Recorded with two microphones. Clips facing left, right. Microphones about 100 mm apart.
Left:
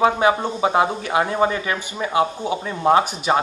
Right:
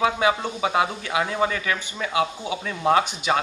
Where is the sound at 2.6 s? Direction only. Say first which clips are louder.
Left 3 dB; 20° left (ahead or behind).